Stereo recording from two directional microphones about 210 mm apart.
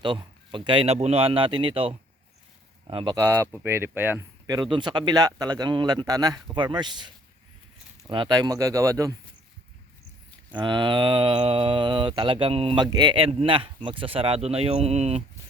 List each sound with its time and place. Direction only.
0.0 s speech: 20° right (ahead or behind)
3.2 s speech: 15° right (ahead or behind)
10.5 s speech: 20° right (ahead or behind)